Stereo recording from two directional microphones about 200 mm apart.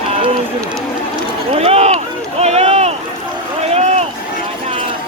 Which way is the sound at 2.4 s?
30° right (ahead or behind).